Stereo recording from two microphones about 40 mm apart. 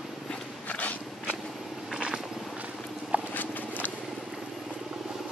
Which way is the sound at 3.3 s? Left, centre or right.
Left.